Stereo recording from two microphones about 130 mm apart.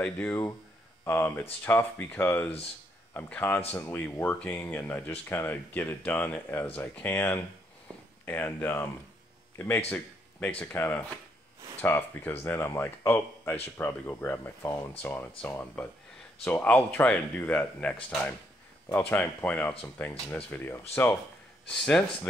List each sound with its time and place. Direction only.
0.0 s speech: 10° left (ahead or behind)